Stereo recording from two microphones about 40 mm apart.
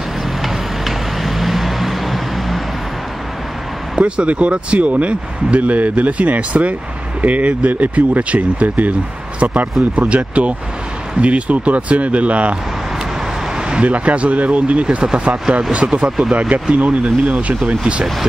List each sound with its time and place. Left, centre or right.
0.4 s vehicle: centre
3.9 s speech: right
13.8 s speech: right